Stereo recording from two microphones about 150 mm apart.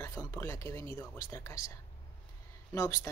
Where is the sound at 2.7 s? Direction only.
20° left (ahead or behind).